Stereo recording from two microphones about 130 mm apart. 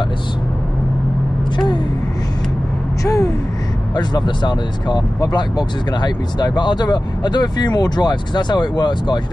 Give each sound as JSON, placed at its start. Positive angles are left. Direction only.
{"t": 3.0, "sound": "gasp", "side_deg": 25}
{"t": 3.9, "sound": "speech", "side_deg": 35}